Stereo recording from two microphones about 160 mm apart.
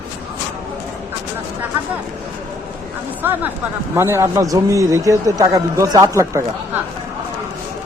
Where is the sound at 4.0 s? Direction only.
15° right (ahead or behind).